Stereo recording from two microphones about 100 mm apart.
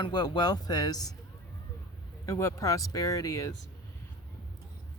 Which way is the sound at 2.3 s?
30° left (ahead or behind).